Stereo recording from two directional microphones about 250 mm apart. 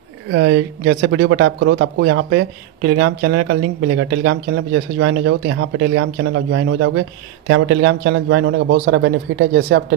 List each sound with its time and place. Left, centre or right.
0.3 s speech: right
0.8 s speech: right